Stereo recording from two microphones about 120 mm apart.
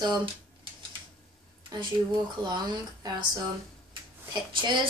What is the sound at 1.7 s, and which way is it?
A woman's voice, 35° right (ahead or behind).